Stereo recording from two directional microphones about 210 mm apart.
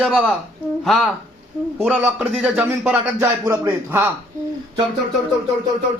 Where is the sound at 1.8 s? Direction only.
5° right (ahead or behind).